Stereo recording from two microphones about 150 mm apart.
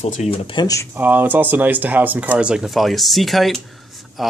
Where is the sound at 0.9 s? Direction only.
10° right (ahead or behind).